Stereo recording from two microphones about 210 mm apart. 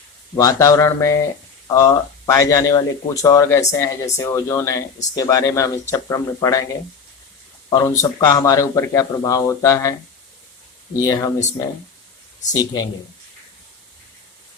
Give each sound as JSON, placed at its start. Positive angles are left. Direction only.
{"t": 0.3, "sound": "speech", "side_deg": 15}
{"t": 7.7, "sound": "speech", "side_deg": 15}
{"t": 10.9, "sound": "speech", "side_deg": 15}
{"t": 12.5, "sound": "speech", "side_deg": 20}